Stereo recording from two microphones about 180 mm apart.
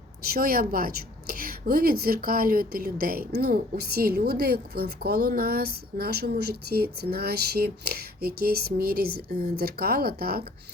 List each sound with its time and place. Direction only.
0.2 s a woman's voice: 55° right (ahead or behind)